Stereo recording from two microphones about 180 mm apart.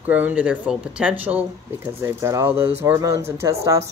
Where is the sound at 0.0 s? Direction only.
10° right (ahead or behind).